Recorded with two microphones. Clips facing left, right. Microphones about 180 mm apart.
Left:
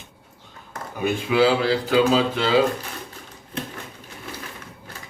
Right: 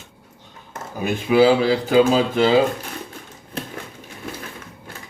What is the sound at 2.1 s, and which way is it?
Speech, 45° right (ahead or behind).